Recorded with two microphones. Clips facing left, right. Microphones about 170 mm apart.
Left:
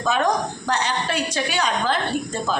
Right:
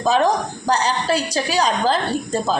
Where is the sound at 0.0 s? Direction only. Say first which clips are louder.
Right 4 dB; 30° right (ahead or behind).